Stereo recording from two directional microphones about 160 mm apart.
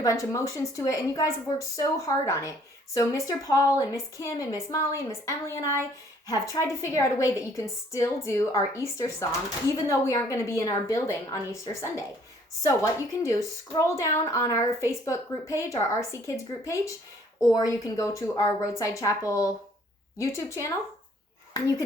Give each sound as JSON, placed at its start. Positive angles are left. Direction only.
{"t": 0.0, "sound": "a woman's voice", "side_deg": 20}